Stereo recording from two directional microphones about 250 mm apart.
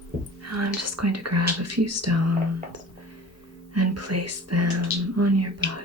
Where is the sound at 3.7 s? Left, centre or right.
Right.